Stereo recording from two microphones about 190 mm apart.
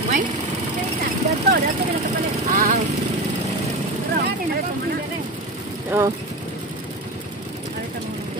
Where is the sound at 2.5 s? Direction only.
50° right (ahead or behind).